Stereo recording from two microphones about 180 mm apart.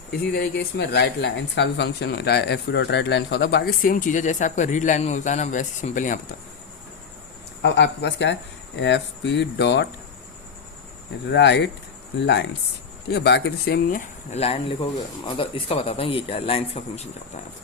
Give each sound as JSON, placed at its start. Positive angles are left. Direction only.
{"t": 0.1, "sound": "speech", "side_deg": 65}
{"t": 7.6, "sound": "speech", "side_deg": 75}
{"t": 11.3, "sound": "speech", "side_deg": 75}
{"t": 13.9, "sound": "speech", "side_deg": 35}